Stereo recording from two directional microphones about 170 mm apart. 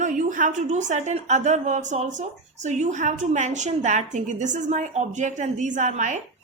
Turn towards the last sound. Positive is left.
turn(degrees=-45)  # may be behind; listen again after turning